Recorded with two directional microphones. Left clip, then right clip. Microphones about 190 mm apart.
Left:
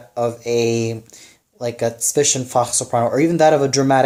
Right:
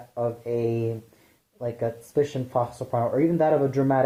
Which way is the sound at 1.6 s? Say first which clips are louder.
Left 8 dB; 35° left (ahead or behind).